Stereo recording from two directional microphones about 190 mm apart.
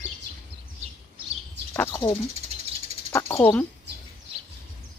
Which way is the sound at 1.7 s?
15° left (ahead or behind).